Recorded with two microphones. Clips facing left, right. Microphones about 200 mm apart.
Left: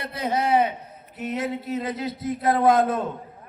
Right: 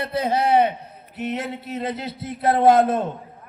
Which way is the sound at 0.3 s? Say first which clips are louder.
Right 2 dB; 65° right (ahead or behind).